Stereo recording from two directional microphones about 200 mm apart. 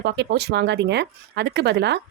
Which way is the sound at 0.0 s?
55° right (ahead or behind).